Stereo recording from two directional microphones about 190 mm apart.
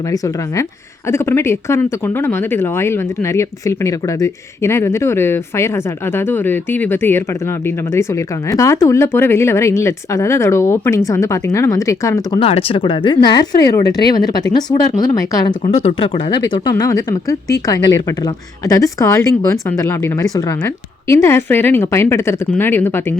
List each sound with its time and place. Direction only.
0.1 s speech: 15° left (ahead or behind)
12.4 s speech: 30° left (ahead or behind)
15.6 s speech: 35° left (ahead or behind); by 23.1 s 10° left (ahead or behind)